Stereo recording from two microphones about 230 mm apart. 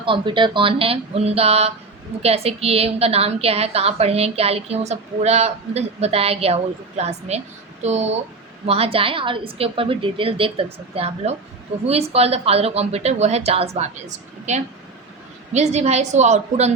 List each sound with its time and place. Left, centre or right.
0.0 s a woman's voice: right